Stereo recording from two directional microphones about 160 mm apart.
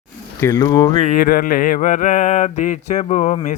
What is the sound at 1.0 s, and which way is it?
Mantra, 60° left (ahead or behind).